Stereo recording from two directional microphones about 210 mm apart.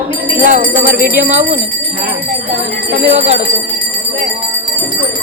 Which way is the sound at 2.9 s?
30° right (ahead or behind).